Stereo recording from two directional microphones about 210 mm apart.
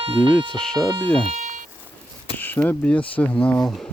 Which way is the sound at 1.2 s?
35° right (ahead or behind).